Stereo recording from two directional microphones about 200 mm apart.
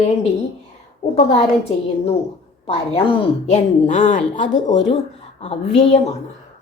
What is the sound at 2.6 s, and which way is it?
Speech, 30° left (ahead or behind).